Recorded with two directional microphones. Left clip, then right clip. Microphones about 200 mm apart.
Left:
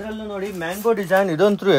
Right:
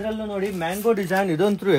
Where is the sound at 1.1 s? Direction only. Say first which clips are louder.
Left 4 dB; 25° left (ahead or behind).